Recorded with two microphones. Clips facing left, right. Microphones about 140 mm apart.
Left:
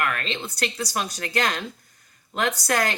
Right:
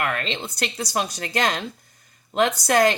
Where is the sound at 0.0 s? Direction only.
20° right (ahead or behind).